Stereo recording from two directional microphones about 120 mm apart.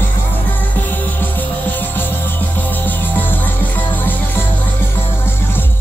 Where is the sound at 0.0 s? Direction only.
15° left (ahead or behind).